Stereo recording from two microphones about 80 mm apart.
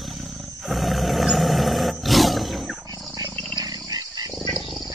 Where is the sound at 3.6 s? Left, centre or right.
Right.